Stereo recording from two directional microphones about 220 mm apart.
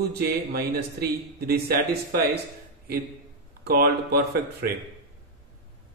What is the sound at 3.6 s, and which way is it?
A man's voice, 45° right (ahead or behind).